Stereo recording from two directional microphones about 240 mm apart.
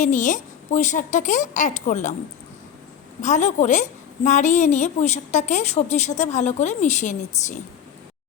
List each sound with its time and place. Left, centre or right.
0.0 s speech: left
3.2 s a woman's voice: left